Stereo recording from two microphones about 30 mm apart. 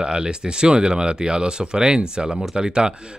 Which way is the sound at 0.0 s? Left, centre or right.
Right.